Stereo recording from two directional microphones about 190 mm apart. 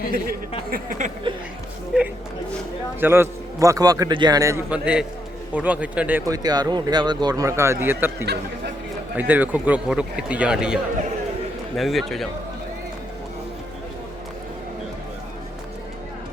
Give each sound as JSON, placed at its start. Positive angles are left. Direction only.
{"t": 0.7, "sound": "a sound", "side_deg": -45}
{"t": 1.9, "sound": "a man's voice", "side_deg": -5}
{"t": 8.2, "sound": "speech", "side_deg": -60}
{"t": 9.1, "sound": "speech", "side_deg": -10}
{"t": 11.8, "sound": "a man's voice", "side_deg": 0}